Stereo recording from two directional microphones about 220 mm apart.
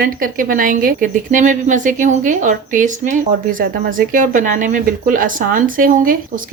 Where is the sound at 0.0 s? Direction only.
40° right (ahead or behind).